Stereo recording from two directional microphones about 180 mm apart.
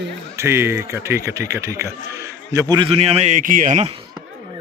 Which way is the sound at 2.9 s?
35° right (ahead or behind).